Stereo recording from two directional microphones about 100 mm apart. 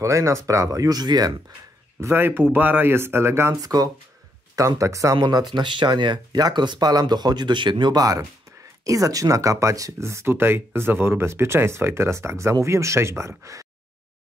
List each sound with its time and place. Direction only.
0.0 s speech: 30° right (ahead or behind)
2.0 s speech: 25° right (ahead or behind)
3.5 s speech: 40° right (ahead or behind)
5.1 s speech: 45° right (ahead or behind)